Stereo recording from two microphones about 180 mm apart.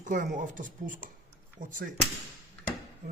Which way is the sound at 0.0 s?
45° right (ahead or behind).